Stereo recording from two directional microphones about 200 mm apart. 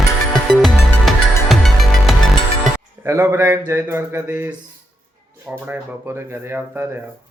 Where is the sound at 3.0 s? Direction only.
15° right (ahead or behind).